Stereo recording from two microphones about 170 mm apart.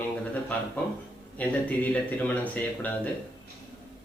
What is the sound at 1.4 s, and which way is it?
Speech, 10° left (ahead or behind).